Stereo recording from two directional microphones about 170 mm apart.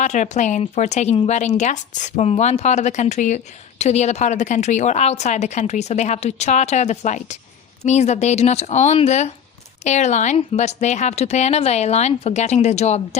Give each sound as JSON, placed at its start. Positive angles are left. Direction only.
{"t": 0.0, "sound": "speech", "side_deg": 45}